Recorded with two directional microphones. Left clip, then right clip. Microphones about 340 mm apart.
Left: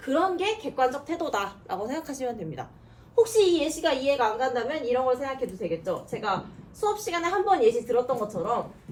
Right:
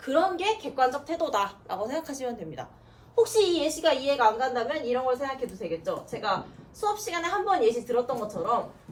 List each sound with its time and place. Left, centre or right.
0.0 s a woman's voice: centre